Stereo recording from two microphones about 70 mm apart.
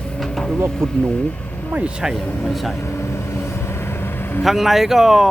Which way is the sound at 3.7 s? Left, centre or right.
Left.